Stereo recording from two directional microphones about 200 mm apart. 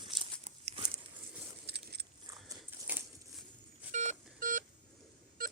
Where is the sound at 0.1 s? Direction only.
30° right (ahead or behind).